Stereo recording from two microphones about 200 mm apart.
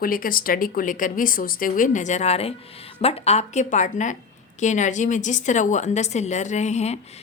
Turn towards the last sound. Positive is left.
turn(degrees=30)  # may be behind; listen again after turning